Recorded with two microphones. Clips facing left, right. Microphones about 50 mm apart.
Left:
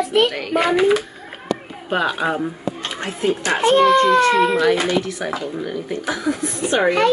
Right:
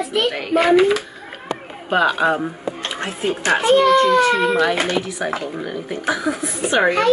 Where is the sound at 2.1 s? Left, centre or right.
Centre.